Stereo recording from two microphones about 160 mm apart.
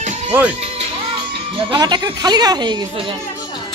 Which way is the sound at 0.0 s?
45° right (ahead or behind).